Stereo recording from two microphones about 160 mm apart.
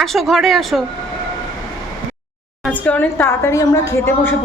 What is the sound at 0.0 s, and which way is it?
Speech, centre (ahead or behind).